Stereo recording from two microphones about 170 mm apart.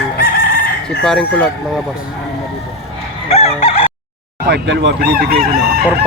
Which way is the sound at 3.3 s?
40° left (ahead or behind).